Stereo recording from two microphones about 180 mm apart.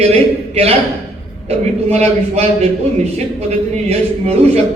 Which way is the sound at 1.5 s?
35° right (ahead or behind).